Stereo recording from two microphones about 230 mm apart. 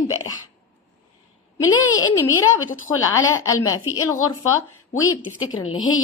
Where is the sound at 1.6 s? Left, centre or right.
Left.